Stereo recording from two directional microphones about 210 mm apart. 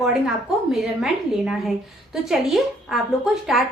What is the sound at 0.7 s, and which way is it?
A woman's voice, centre (ahead or behind).